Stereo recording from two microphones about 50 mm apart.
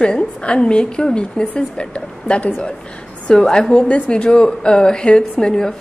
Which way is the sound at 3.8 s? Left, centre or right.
Left.